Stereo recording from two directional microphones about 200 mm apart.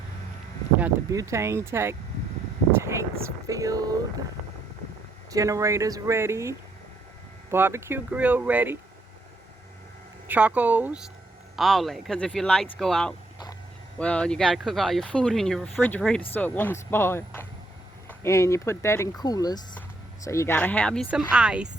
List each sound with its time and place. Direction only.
0.8 s speech: 15° right (ahead or behind)
2.7 s vehicle: 15° right (ahead or behind)
3.4 s speech: 15° right (ahead or behind)
5.3 s speech: 15° right (ahead or behind)
10.2 s speech: 5° right (ahead or behind)